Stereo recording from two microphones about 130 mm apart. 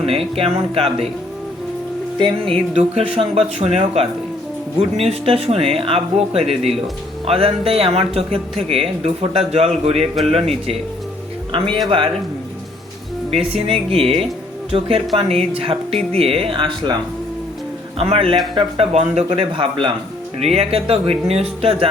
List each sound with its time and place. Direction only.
0.0 s speech: 50° right (ahead or behind)
2.1 s music: 40° right (ahead or behind)
2.7 s speech: 55° right (ahead or behind)
11.5 s speech: 45° right (ahead or behind)
13.3 s speech: 45° right (ahead or behind)
17.9 s a man's voice: 50° right (ahead or behind)